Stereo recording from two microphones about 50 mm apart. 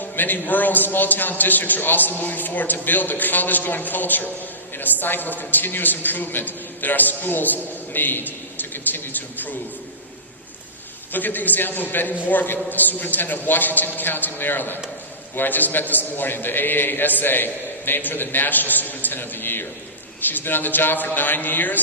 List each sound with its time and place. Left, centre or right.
0.0 s a man's voice: left
11.1 s a man's voice: left